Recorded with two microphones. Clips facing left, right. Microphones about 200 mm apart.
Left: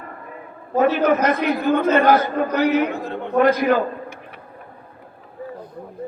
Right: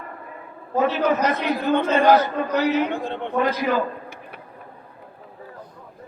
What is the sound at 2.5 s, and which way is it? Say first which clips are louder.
Speech: left 2 dB; 60° left (ahead or behind).